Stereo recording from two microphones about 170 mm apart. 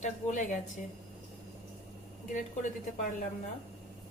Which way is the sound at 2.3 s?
50° left (ahead or behind).